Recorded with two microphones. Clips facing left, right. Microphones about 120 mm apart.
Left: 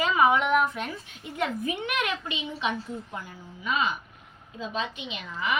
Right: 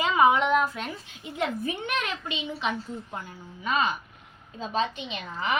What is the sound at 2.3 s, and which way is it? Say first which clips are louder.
A woman's voice: even; 30° right (ahead or behind).